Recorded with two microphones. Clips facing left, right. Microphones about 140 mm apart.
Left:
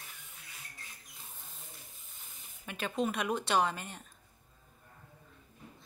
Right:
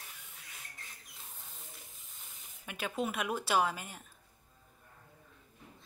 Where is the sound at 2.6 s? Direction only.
10° right (ahead or behind).